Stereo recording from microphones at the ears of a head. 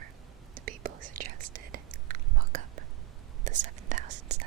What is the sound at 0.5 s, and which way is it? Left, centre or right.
Whispering, right.